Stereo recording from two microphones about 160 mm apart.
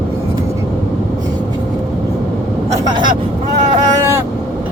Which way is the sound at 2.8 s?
30° right (ahead or behind).